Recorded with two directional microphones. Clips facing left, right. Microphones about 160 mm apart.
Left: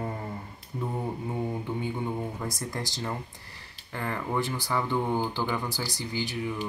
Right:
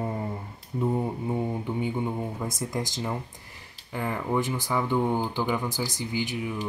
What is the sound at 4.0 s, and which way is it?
Speech, 10° right (ahead or behind).